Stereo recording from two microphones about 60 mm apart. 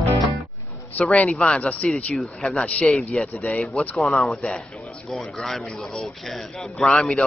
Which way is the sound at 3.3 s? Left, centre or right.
Left.